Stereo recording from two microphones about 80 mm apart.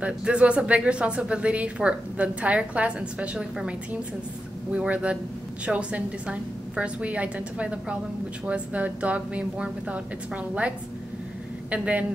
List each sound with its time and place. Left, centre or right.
0.0 s speech: centre
11.7 s speech: centre